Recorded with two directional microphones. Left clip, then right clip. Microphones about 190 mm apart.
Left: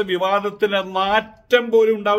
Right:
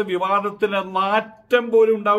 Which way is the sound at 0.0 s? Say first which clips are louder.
Left 1 dB; 10° left (ahead or behind).